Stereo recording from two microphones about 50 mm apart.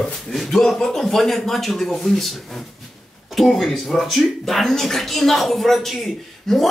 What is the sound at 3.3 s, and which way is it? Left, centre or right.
Speech, centre.